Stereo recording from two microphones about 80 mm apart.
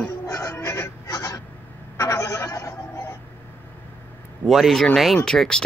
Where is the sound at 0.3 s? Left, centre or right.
Left.